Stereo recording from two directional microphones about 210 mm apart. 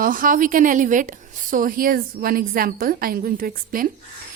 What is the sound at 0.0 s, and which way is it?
A woman's voice, 40° right (ahead or behind).